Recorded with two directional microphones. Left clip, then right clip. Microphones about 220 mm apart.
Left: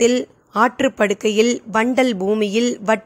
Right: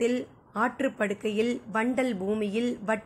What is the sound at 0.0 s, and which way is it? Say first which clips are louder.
Speech: left 11 dB; 45° left (ahead or behind).